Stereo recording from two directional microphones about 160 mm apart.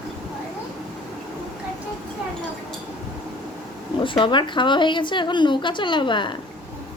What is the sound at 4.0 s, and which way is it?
A woman's voice, 30° left (ahead or behind).